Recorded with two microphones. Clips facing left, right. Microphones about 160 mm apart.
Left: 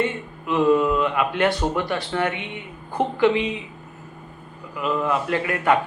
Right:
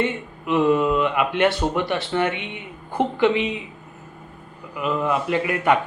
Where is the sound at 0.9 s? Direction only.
20° right (ahead or behind).